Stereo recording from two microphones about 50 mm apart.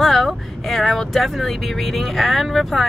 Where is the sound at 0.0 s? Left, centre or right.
Centre.